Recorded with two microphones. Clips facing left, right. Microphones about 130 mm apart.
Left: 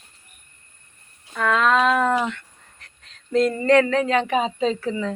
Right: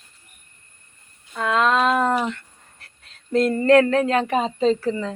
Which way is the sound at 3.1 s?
45° right (ahead or behind).